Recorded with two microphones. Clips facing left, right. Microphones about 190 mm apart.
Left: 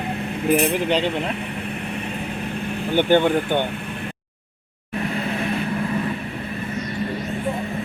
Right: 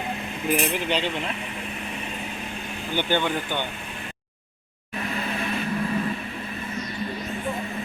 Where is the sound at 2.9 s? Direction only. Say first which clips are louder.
Left 8 dB; 55° left (ahead or behind).